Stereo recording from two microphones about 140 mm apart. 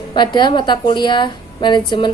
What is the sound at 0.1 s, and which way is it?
Speech, 35° left (ahead or behind).